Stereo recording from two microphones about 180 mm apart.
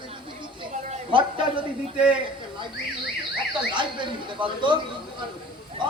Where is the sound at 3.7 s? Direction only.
25° right (ahead or behind).